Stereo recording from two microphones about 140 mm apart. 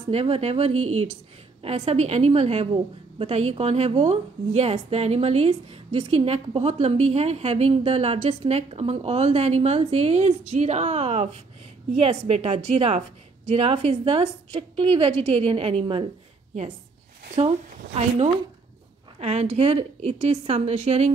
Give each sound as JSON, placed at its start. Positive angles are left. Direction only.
{"t": 0.1, "sound": "a woman's voice", "side_deg": -45}
{"t": 17.4, "sound": "a woman's voice", "side_deg": -50}